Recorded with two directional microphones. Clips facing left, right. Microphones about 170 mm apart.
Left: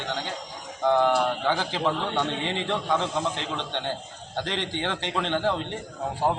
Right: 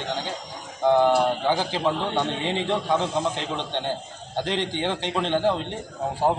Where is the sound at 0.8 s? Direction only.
10° right (ahead or behind).